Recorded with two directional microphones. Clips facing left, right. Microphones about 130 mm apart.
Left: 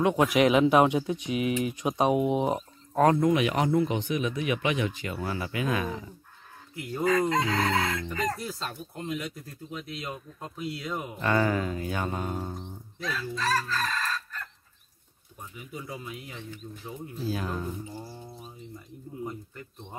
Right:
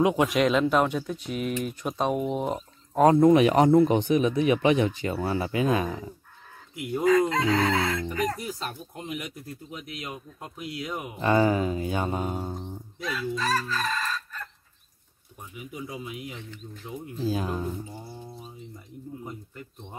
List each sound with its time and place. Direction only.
0.1 s speech: centre (ahead or behind)
3.0 s speech: 20° right (ahead or behind)
3.3 s speech: 40° right (ahead or behind)
6.7 s goose: 15° right (ahead or behind)
7.2 s fowl: centre (ahead or behind)
8.1 s speech: 10° right (ahead or behind)
11.1 s speech: 20° right (ahead or behind)
15.5 s speech: 15° right (ahead or behind)